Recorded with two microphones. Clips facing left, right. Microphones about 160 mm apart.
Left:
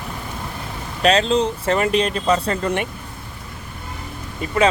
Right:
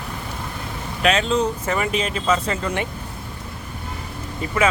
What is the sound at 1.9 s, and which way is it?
Speech, 5° right (ahead or behind).